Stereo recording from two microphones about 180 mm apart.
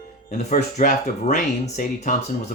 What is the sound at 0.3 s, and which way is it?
Speech, 45° left (ahead or behind).